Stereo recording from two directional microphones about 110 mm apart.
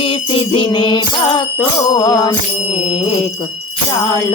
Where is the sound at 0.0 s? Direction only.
55° left (ahead or behind); by 2.3 s 35° left (ahead or behind).